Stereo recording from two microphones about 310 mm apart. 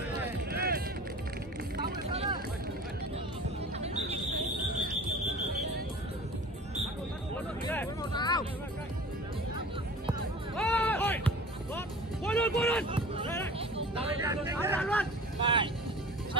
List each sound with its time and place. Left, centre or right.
0.5 s music: right
7.7 s music: centre
10.5 s music: centre
12.3 s vehicle: centre
12.9 s a sound: centre
13.6 s vehicle: centre
14.8 s vehicle: centre
15.4 s vehicle: centre